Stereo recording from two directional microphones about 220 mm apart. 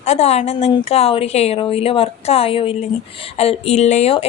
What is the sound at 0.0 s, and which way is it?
Speech, 30° left (ahead or behind).